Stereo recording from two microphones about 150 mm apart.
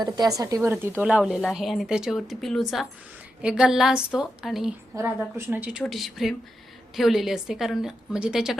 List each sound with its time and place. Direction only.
0.0 s speech: 25° right (ahead or behind)
1.0 s a woman's voice: 5° right (ahead or behind)
5.4 s speech: 15° right (ahead or behind)
5.8 s a woman's voice: centre (ahead or behind)